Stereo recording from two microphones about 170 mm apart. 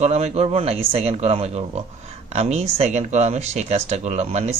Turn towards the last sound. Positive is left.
turn(degrees=-40)  # may be behind; listen again after turning